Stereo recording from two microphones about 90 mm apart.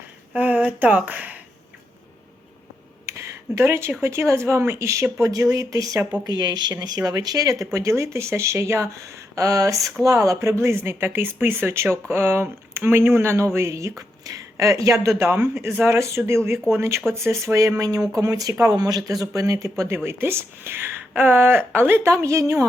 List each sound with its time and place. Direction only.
0.3 s speech: 20° right (ahead or behind)
3.1 s a sound: 35° right (ahead or behind)
4.0 s speech: 30° right (ahead or behind)
15.2 s speech: 25° right (ahead or behind)